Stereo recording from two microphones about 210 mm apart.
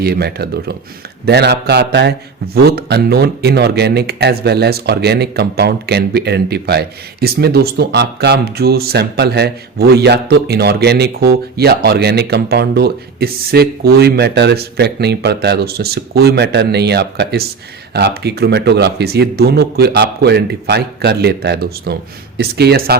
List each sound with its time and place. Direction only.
0.0 s speech: 50° right (ahead or behind)